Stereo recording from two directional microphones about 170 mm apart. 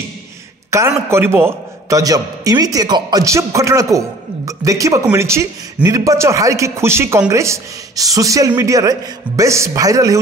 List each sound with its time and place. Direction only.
0.7 s a man's voice: 15° right (ahead or behind)